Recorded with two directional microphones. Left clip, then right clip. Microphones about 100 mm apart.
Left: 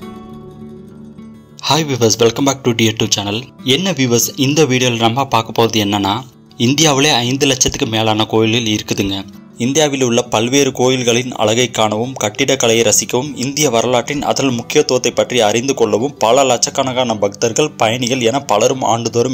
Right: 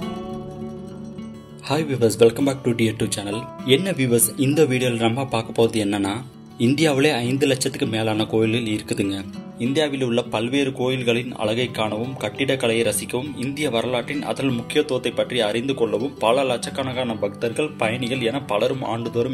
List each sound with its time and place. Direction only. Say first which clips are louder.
1.6 s speech: left 7 dB; 55° left (ahead or behind); by 6.0 s 35° left (ahead or behind)
6.0 s speech: left 10 dB; 55° left (ahead or behind)
6.7 s speech: left 7 dB; 40° left (ahead or behind); by 19.3 s 65° left (ahead or behind)